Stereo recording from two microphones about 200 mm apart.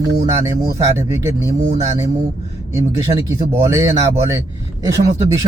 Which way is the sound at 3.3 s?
15° right (ahead or behind).